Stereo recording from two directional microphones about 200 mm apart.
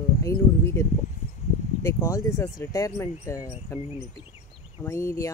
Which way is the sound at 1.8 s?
15° left (ahead or behind).